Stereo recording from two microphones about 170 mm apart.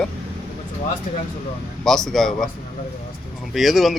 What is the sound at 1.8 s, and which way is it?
Speech, 5° left (ahead or behind).